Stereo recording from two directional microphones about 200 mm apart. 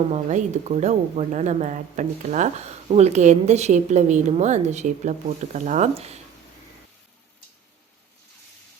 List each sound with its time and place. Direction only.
0.1 s speech: 35° right (ahead or behind)